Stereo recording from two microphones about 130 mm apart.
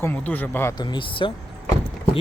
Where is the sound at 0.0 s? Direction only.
15° left (ahead or behind).